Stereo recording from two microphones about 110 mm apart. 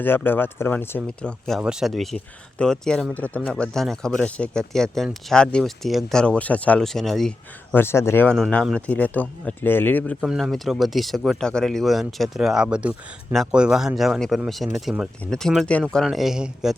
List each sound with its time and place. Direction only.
0.0 s speech: 20° left (ahead or behind)
1.5 s speech: 5° right (ahead or behind); by 3.5 s 15° left (ahead or behind)
3.5 s speech: centre (ahead or behind)
7.7 s speech: 20° left (ahead or behind)
8.3 s speech: 10° left (ahead or behind)
10.2 s speech: centre (ahead or behind)